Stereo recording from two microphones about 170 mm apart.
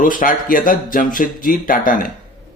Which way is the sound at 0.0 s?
50° left (ahead or behind).